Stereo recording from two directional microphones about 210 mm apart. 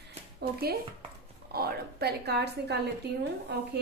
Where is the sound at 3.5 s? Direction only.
50° right (ahead or behind).